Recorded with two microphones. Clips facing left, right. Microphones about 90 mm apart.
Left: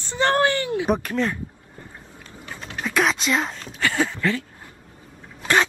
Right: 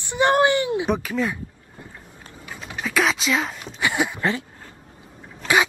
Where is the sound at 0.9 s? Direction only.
Centre (ahead or behind).